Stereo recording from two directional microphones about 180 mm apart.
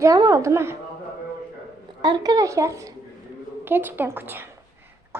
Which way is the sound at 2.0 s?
25° right (ahead or behind).